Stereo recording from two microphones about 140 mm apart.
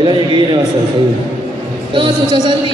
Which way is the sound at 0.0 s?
30° right (ahead or behind).